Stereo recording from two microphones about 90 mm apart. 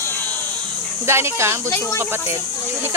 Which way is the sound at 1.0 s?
30° right (ahead or behind).